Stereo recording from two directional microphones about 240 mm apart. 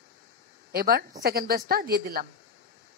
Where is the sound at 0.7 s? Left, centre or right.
Right.